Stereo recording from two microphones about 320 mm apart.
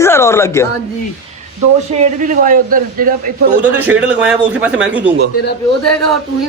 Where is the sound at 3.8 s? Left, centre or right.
Centre.